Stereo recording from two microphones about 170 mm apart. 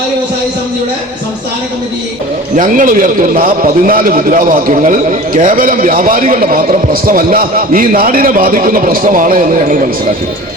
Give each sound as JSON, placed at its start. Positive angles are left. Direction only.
{"t": 2.6, "sound": "a man's voice", "side_deg": -50}